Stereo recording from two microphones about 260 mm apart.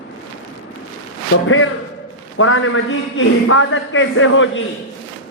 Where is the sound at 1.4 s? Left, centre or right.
Left.